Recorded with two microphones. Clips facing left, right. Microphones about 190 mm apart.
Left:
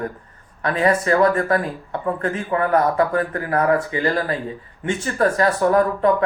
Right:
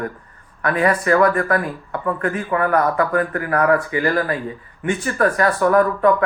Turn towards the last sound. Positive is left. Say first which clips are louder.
# right 1 dB
turn(degrees=25)  # may be behind; listen again after turning